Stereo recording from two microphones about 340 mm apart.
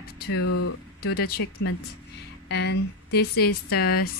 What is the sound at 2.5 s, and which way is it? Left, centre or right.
A woman's voice, left.